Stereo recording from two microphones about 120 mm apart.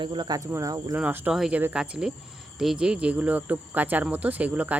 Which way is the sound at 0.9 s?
15° right (ahead or behind).